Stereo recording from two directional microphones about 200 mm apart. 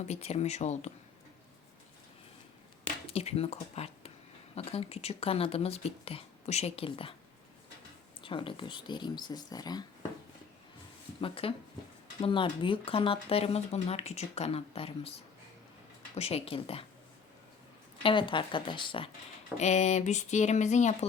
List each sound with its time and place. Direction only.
0.0 s speech: 30° left (ahead or behind)
3.1 s speech: 30° left (ahead or behind)
8.2 s speech: 25° left (ahead or behind)
11.2 s speech: 25° left (ahead or behind)
16.1 s speech: 30° left (ahead or behind)
18.0 s speech: 25° left (ahead or behind)